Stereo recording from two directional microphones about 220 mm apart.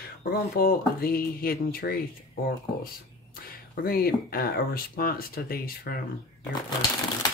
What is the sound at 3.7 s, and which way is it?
Speech, 40° left (ahead or behind).